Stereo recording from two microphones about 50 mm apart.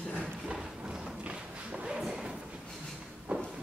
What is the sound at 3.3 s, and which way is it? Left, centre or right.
Walk, right.